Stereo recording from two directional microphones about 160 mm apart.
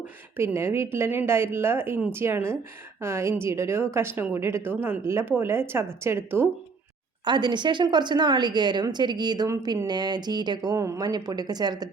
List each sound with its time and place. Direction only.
0.3 s a woman's voice: 15° right (ahead or behind)
7.3 s a woman's voice: 30° right (ahead or behind)